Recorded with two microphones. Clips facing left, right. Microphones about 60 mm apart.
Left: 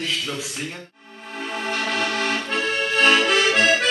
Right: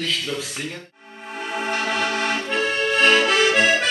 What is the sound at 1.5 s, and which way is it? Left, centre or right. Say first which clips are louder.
Accordion: right 2 dB; centre.